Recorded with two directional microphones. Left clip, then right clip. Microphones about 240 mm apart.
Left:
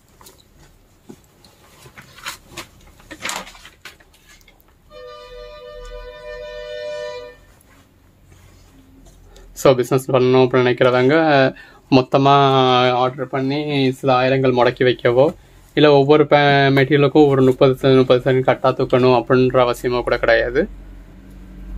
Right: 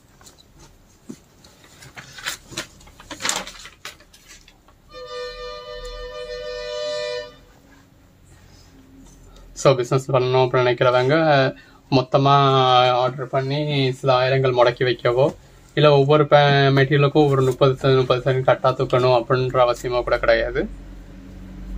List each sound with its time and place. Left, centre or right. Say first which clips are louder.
9.6 s speech: left 3 dB; left